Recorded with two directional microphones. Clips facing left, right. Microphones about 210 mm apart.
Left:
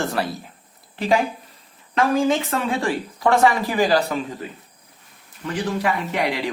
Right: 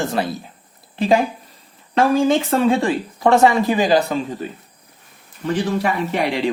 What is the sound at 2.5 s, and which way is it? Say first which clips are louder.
Speech: right 6 dB; 25° right (ahead or behind).